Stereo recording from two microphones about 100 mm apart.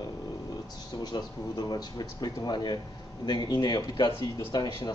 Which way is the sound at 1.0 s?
45° left (ahead or behind).